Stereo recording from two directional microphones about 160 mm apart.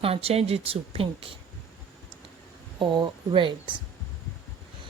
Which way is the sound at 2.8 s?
30° right (ahead or behind).